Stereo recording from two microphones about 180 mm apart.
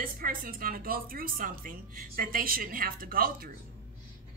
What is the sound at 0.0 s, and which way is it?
A woman's voice, 50° right (ahead or behind).